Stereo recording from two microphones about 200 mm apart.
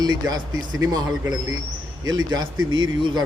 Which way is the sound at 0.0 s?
20° right (ahead or behind).